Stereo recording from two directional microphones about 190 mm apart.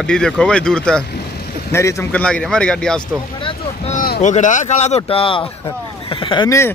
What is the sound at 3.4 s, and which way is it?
Boat, 30° left (ahead or behind).